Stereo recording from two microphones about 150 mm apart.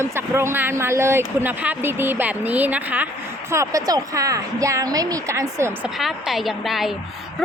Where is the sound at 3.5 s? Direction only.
20° right (ahead or behind).